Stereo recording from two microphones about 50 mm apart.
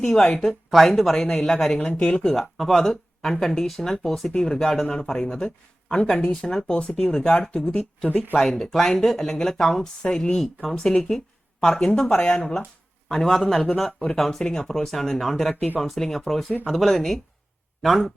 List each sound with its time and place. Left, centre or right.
0.0 s speech: centre
1.9 s speech: left
2.3 s speech: centre
8.4 s speech: centre
12.1 s speech: left; by 18.1 s centre